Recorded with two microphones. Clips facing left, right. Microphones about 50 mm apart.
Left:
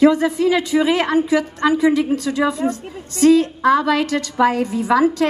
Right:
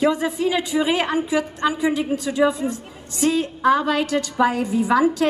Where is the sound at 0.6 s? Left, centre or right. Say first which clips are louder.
Left 4 dB; right.